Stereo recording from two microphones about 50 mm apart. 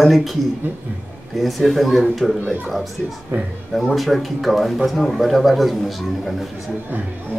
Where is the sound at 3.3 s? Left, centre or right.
Right.